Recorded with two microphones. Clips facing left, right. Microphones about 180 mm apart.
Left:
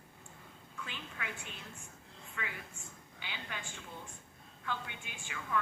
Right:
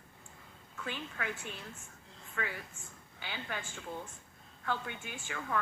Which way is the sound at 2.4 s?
45° right (ahead or behind).